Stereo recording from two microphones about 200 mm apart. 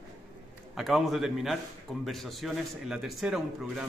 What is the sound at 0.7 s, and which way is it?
Speech, centre (ahead or behind).